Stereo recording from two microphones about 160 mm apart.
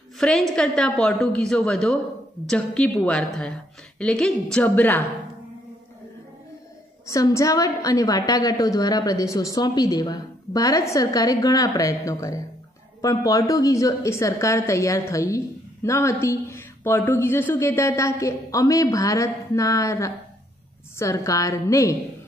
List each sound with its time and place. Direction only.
0.2 s a woman's voice: 5° left (ahead or behind)
7.1 s a woman's voice: 20° left (ahead or behind)